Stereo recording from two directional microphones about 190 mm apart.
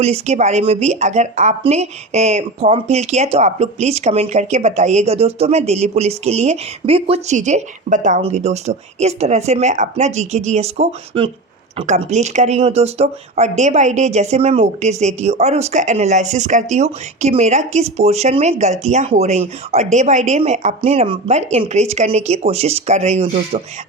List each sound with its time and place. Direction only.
0.0 s speech: 35° right (ahead or behind)